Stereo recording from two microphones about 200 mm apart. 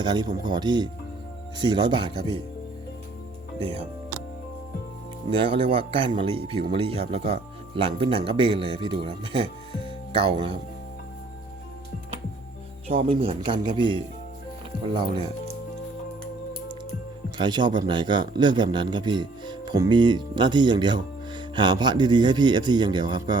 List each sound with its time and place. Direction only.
0.0 s speech: 20° right (ahead or behind)
5.3 s speech: 25° right (ahead or behind)
12.9 s speech: 25° right (ahead or behind)
17.3 s speech: 20° right (ahead or behind)